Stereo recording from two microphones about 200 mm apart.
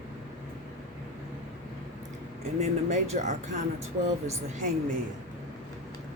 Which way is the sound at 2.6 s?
35° right (ahead or behind).